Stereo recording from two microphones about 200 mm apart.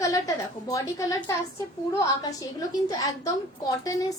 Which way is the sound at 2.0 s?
15° left (ahead or behind).